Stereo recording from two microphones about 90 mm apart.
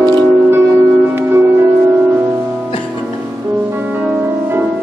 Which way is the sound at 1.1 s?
25° right (ahead or behind).